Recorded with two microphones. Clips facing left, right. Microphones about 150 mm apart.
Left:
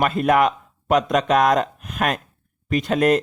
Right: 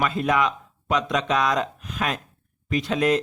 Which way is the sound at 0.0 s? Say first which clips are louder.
Left 5 dB; 55° left (ahead or behind).